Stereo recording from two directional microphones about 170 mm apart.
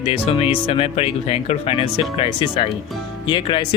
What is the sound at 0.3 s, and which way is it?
Speech, 35° left (ahead or behind).